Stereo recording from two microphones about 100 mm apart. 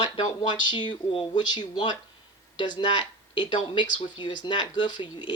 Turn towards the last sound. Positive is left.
turn(degrees=50)  # may be behind; listen again after turning